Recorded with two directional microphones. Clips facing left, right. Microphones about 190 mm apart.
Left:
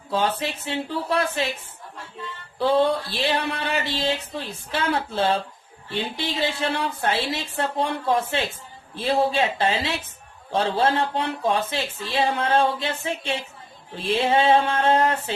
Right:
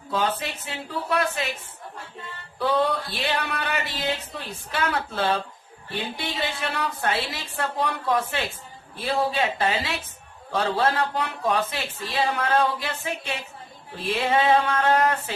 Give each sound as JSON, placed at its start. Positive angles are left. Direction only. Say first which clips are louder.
{"t": 0.1, "sound": "speech", "louder": "left 2 dB", "side_deg": 30}
{"t": 2.6, "sound": "speech", "louder": "left 3 dB", "side_deg": 25}